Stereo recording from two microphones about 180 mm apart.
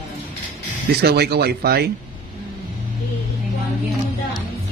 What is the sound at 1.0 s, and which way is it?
Speech, 65° right (ahead or behind).